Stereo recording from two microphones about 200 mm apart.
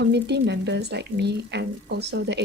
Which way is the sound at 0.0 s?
60° right (ahead or behind).